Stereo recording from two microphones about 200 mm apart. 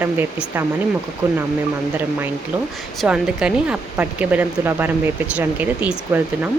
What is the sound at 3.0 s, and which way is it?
Speech, 5° right (ahead or behind).